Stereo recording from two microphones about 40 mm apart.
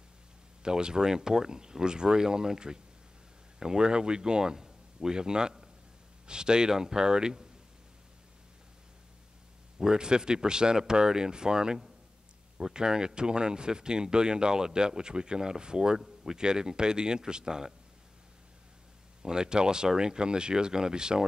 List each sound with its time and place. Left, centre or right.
0.6 s speech: centre
9.8 s speech: centre
19.2 s speech: centre